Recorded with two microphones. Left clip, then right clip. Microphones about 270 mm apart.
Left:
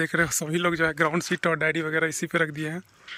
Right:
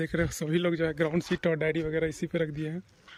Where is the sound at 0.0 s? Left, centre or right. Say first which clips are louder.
Left 6 dB; centre.